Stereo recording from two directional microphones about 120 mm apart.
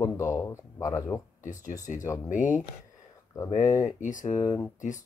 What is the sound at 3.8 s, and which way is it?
Speech, 90° left.